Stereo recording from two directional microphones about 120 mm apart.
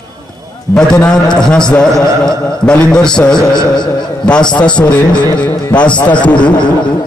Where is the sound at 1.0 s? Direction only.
5° left (ahead or behind).